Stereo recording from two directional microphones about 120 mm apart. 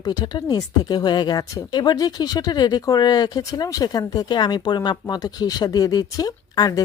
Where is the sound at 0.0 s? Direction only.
35° left (ahead or behind).